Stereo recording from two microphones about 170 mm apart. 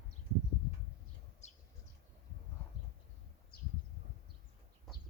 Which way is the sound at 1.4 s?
40° left (ahead or behind).